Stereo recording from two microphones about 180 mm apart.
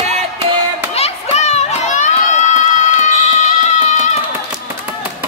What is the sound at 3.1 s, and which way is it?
Music, 40° left (ahead or behind).